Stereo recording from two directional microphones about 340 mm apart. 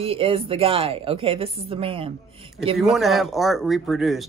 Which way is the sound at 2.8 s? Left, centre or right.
Centre.